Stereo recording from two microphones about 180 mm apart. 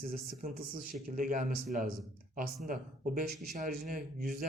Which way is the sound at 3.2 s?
45° right (ahead or behind).